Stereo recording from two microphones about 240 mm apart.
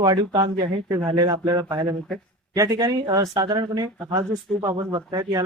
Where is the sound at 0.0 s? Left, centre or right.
Centre.